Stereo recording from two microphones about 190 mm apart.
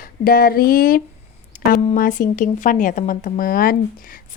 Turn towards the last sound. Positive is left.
turn(degrees=50)  # may be behind; listen again after turning